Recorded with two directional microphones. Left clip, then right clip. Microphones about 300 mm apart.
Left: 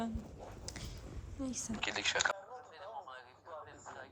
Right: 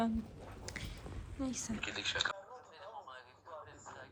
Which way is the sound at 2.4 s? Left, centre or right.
Centre.